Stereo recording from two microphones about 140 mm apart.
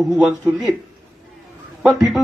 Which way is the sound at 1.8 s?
Centre (ahead or behind).